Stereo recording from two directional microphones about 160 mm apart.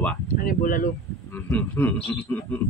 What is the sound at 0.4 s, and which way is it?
Speech, 60° left (ahead or behind).